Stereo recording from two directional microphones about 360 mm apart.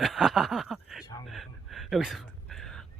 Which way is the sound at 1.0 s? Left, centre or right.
Centre.